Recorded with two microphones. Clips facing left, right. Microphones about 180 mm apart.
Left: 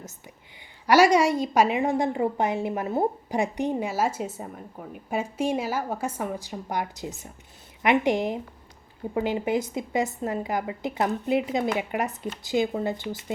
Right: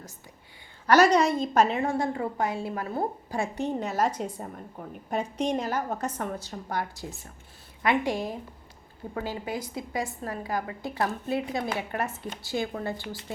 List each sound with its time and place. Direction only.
0.9 s a woman's voice: 10° left (ahead or behind)